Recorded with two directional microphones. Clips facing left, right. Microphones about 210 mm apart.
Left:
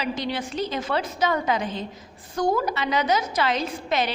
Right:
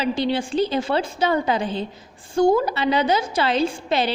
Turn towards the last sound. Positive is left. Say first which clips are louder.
# right 4 dB
turn(degrees=-30)  # may be behind; listen again after turning